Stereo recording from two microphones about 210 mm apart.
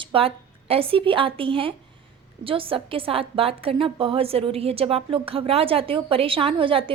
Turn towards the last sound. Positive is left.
turn(degrees=-25)  # may be behind; listen again after turning